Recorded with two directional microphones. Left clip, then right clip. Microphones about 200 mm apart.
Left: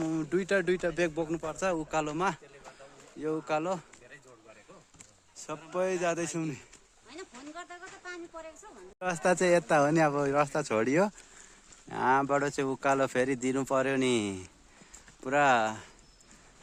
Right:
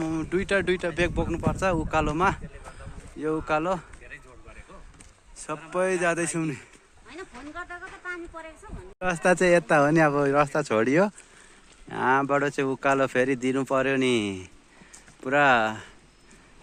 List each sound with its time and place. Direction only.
0.0 s speech: 25° left (ahead or behind)
1.5 s speech: centre (ahead or behind)
5.4 s a sound: 10° right (ahead or behind)
5.7 s speech: 5° right (ahead or behind)